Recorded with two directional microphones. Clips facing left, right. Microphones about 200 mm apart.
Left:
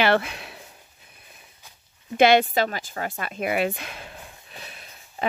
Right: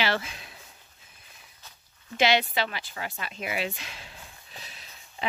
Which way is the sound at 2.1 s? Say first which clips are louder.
Left 7 dB; 50° left (ahead or behind).